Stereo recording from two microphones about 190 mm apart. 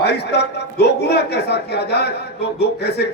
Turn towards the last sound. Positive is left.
turn(degrees=60)  # may be behind; listen again after turning